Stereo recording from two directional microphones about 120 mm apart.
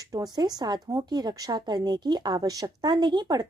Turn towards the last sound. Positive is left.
turn(degrees=-35)  # may be behind; listen again after turning